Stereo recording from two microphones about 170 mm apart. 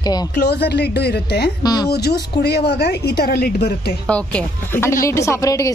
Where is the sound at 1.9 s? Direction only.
70° left (ahead or behind).